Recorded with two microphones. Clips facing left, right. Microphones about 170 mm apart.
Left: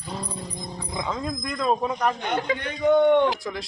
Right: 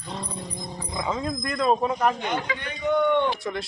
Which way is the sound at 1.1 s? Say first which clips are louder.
Right 3 dB; centre (ahead or behind).